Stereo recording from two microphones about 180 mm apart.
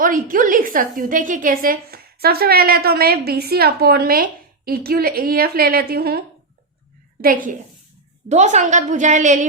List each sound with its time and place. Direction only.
0.0 s a woman's voice: 50° right (ahead or behind)
8.3 s a woman's voice: 40° right (ahead or behind)